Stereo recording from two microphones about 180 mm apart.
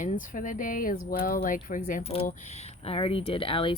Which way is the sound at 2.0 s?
30° left (ahead or behind).